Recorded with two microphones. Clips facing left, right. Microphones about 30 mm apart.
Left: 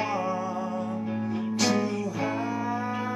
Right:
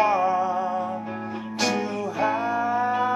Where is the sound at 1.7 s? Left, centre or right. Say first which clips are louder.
Right 1 dB; centre.